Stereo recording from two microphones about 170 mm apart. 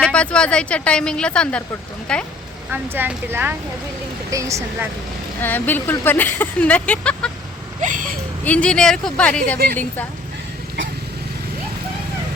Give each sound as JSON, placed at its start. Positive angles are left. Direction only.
{"t": 0.0, "sound": "speech", "side_deg": 5}
{"t": 2.7, "sound": "speech", "side_deg": -10}
{"t": 5.4, "sound": "speech", "side_deg": 10}
{"t": 7.8, "sound": "a sound", "side_deg": -50}
{"t": 8.4, "sound": "speech", "side_deg": 5}